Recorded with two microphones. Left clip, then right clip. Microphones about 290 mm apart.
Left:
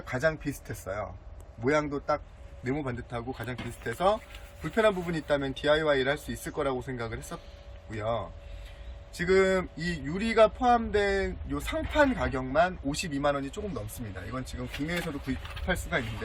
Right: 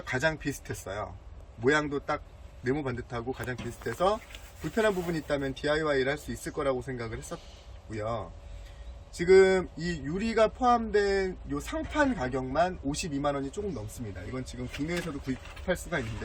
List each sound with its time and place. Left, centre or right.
0.0 s speech: centre
14.8 s speech: centre